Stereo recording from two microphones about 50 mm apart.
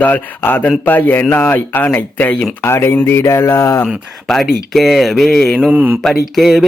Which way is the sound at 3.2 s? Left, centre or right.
Left.